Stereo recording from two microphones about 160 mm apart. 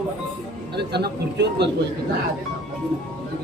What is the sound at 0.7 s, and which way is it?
Speech, 90° right.